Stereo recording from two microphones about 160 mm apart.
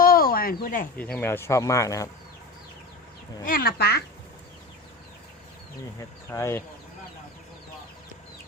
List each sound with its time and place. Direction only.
0.0 s a sound: 65° left (ahead or behind)
0.9 s speech: 10° left (ahead or behind)
3.4 s speech: 65° left (ahead or behind); by 4.0 s 80° left
6.0 s speech: 20° left (ahead or behind)